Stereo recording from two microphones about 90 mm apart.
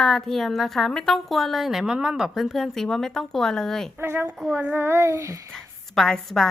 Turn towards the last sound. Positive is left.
turn(degrees=5)  # may be behind; listen again after turning